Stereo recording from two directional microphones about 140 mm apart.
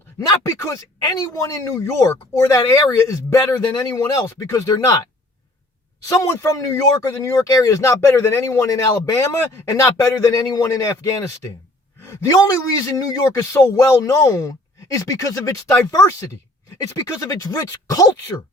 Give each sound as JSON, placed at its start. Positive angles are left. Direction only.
{"t": 0.2, "sound": "speech", "side_deg": 25}
{"t": 6.1, "sound": "speech", "side_deg": 20}